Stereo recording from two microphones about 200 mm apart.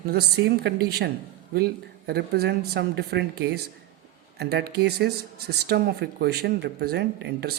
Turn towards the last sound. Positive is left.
turn(degrees=-60)  # may be behind; listen again after turning